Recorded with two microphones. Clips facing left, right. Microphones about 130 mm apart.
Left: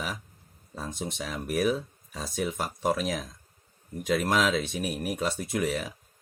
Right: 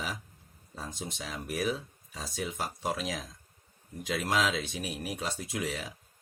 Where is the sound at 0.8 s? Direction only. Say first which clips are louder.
Left 5 dB; 50° left (ahead or behind).